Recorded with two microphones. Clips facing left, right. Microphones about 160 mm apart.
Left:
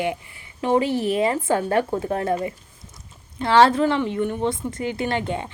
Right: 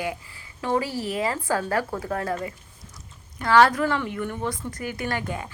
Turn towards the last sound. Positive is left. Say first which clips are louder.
# left 5 dB
turn(degrees=25)  # may be behind; listen again after turning